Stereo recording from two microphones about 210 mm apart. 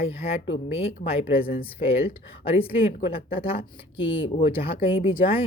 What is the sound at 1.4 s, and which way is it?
Speech, 45° left (ahead or behind).